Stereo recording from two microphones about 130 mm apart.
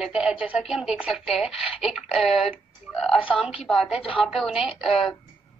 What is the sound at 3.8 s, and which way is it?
Speech, 45° left (ahead or behind).